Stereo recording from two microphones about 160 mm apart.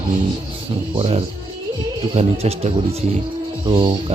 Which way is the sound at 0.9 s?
40° right (ahead or behind).